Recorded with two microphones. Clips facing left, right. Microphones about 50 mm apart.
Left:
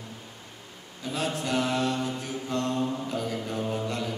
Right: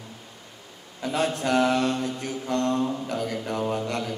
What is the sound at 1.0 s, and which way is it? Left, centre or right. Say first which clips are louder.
Mantra: right 5 dB; right.